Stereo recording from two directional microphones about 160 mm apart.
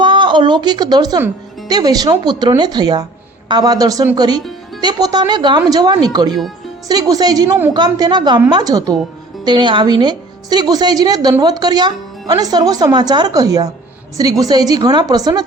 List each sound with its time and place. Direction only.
0.0 s a woman's voice: 30° right (ahead or behind)